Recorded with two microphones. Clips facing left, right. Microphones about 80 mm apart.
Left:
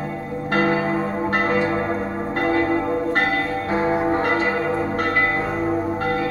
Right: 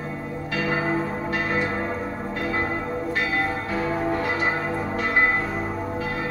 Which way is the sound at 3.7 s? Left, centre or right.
Left.